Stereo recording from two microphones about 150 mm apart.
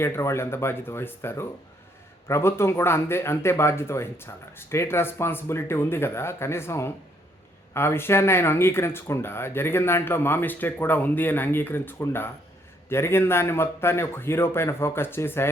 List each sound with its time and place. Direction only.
0.0 s speech: 15° left (ahead or behind)